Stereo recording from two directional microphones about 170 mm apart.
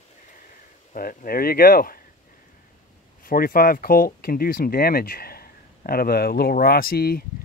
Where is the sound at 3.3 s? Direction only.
55° left (ahead or behind).